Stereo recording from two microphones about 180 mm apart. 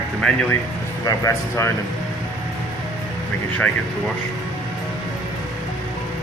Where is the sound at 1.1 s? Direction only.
15° left (ahead or behind).